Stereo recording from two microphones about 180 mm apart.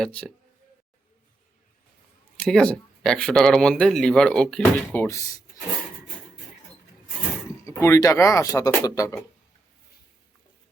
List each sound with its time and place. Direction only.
0.0 s speech: 5° left (ahead or behind)
2.4 s speech: 5° left (ahead or behind)
7.6 s speech: 15° left (ahead or behind)